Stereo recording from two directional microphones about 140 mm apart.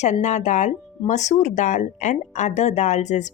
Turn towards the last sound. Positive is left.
turn(degrees=55)  # may be behind; listen again after turning